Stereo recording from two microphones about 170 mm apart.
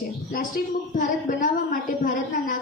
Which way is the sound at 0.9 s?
50° left (ahead or behind).